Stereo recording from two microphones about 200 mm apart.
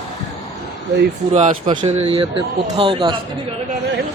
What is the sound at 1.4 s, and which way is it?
Speech, 30° right (ahead or behind).